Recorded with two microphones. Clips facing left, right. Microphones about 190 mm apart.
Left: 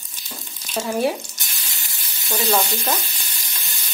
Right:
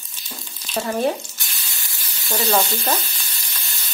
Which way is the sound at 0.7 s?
5° left (ahead or behind).